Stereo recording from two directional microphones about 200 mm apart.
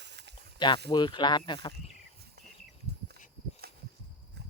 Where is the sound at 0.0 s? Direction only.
60° right (ahead or behind).